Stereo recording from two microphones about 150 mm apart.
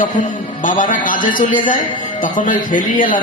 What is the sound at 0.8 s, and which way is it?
A man's voice, 60° left (ahead or behind).